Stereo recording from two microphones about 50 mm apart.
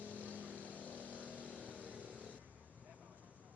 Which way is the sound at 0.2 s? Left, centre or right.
Right.